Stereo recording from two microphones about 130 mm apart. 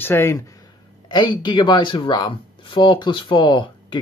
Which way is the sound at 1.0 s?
35° left (ahead or behind).